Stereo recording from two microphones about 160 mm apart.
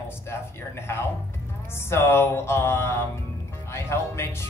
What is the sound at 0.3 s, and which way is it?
Speech, 15° left (ahead or behind).